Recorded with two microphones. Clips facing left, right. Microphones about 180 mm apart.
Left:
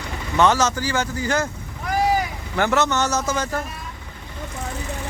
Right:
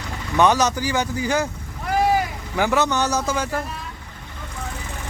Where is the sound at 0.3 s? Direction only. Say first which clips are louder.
Right 1 dB; 15° right (ahead or behind).